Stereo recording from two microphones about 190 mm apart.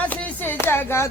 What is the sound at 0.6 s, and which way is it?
Clapping, 10° left (ahead or behind).